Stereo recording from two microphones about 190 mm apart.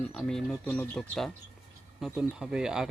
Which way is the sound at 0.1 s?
Centre (ahead or behind).